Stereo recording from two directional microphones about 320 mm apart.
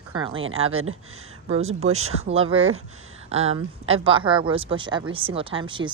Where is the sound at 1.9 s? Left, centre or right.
Centre.